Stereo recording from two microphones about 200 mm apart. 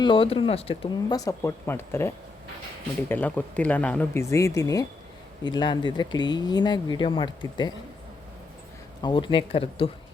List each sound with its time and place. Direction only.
0.0 s speech: 25° left (ahead or behind)
1.2 s speech: 15° left (ahead or behind)
9.0 s speech: 20° left (ahead or behind)